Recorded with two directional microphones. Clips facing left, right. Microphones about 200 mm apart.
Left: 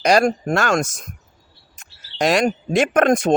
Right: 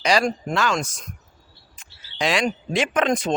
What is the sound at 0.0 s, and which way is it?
Speech, 45° left (ahead or behind).